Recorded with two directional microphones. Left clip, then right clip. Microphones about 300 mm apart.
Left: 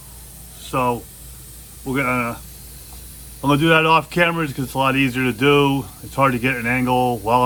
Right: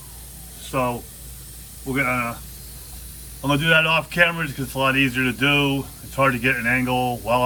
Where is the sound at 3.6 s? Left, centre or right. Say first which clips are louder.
Left 3 dB; centre.